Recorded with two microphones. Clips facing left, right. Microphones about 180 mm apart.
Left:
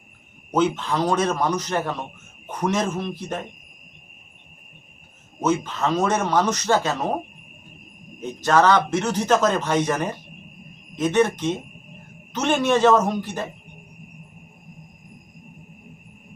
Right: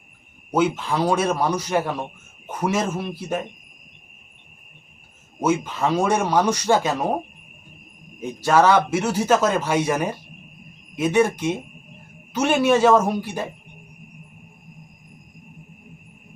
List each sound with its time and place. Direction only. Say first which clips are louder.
0.5 s speech: even; 10° right (ahead or behind)
5.4 s speech: right 1 dB; 10° right (ahead or behind)
8.2 s speech: right 1 dB; 10° right (ahead or behind)